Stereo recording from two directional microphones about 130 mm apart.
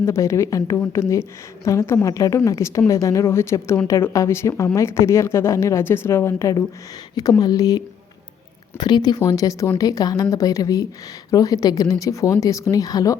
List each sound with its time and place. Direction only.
0.0 s a woman's voice: 20° left (ahead or behind)
8.8 s a woman's voice: 30° left (ahead or behind)